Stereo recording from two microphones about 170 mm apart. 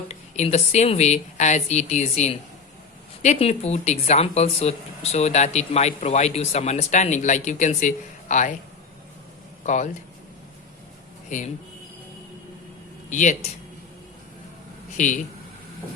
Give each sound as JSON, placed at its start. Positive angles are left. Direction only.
{"t": 0.1, "sound": "speech", "side_deg": 40}
{"t": 9.6, "sound": "speech", "side_deg": 45}
{"t": 11.3, "sound": "speech", "side_deg": 50}
{"t": 13.1, "sound": "speech", "side_deg": 45}
{"t": 14.9, "sound": "speech", "side_deg": 50}